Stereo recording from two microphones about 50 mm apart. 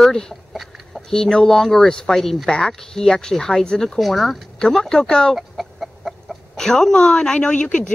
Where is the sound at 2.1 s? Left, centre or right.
Centre.